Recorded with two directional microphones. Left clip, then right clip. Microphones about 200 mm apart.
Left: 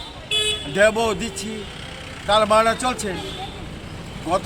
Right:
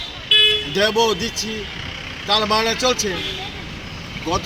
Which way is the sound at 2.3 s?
5° left (ahead or behind).